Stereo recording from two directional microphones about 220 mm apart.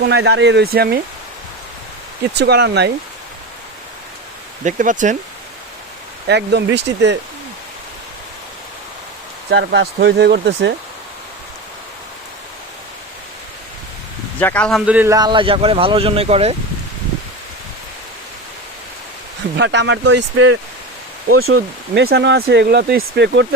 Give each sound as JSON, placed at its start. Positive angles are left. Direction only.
{"t": 0.1, "sound": "speech", "side_deg": -50}
{"t": 2.4, "sound": "speech", "side_deg": -50}
{"t": 4.6, "sound": "speech", "side_deg": -35}
{"t": 6.2, "sound": "speech", "side_deg": -50}
{"t": 9.5, "sound": "speech", "side_deg": -55}
{"t": 14.3, "sound": "speech", "side_deg": 5}
{"t": 14.8, "sound": "speech", "side_deg": -10}
{"t": 19.5, "sound": "speech", "side_deg": -50}
{"t": 20.1, "sound": "speech", "side_deg": -90}
{"t": 21.9, "sound": "speech", "side_deg": -50}